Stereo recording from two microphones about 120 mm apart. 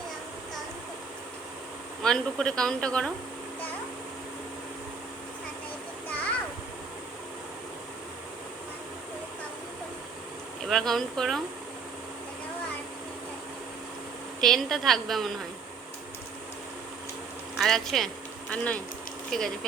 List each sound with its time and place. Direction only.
2.0 s speech: 5° left (ahead or behind)
10.7 s speech: 5° left (ahead or behind)
14.4 s speech: centre (ahead or behind)
17.6 s speech: centre (ahead or behind)